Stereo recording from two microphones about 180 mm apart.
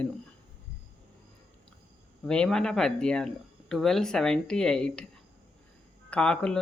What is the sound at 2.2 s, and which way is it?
Speech, 5° left (ahead or behind).